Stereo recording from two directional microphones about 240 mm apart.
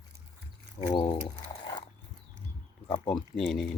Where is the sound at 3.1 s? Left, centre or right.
Centre.